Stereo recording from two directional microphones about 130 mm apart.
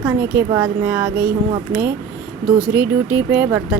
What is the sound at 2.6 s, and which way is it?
Speech, 10° right (ahead or behind).